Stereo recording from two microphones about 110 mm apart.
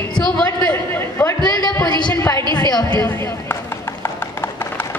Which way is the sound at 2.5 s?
40° left (ahead or behind).